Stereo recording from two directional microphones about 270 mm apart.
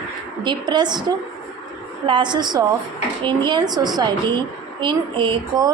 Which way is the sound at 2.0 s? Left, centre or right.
Centre.